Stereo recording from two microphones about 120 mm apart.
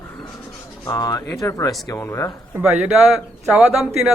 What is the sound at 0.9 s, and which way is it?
Speech, 30° left (ahead or behind).